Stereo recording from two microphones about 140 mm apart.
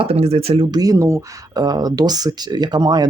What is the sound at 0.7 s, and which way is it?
Speech, 25° right (ahead or behind).